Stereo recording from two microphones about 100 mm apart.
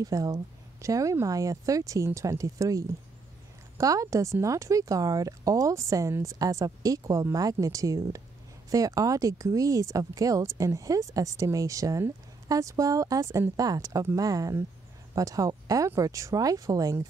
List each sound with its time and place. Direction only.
0.0 s speech: 35° right (ahead or behind)